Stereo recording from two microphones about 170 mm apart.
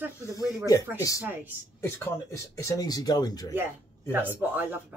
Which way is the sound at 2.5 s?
20° left (ahead or behind).